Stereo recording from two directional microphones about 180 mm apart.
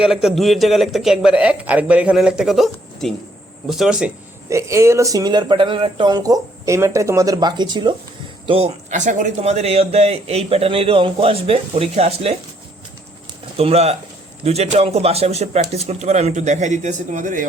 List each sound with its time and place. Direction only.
0.0 s a man's voice: centre (ahead or behind)
4.4 s a man's voice: 15° right (ahead or behind); by 12.4 s 35° right (ahead or behind)
13.6 s a man's voice: 35° right (ahead or behind)